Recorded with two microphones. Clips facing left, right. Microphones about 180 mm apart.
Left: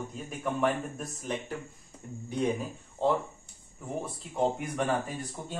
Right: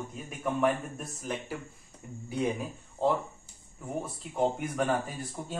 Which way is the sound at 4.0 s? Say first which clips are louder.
Even; centre (ahead or behind).